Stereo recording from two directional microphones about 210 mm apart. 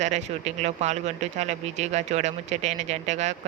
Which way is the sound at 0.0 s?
35° right (ahead or behind).